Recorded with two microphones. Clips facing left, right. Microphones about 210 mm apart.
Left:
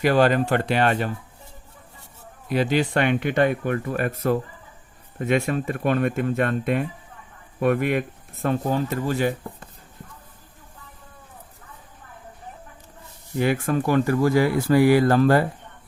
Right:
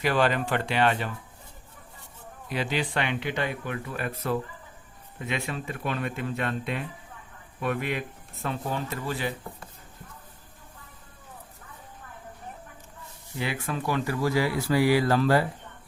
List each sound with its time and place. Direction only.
0.0 s speech: 45° left (ahead or behind)
2.5 s speech: 45° left (ahead or behind)
13.4 s speech: 50° left (ahead or behind)